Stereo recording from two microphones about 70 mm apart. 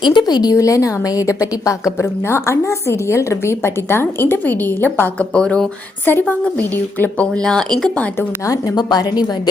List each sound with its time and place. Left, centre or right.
0.1 s a woman's voice: left
0.5 s a woman's voice: left
5.3 s speech: centre
6.1 s a woman's voice: left
7.4 s speech: centre
8.7 s a woman's voice: left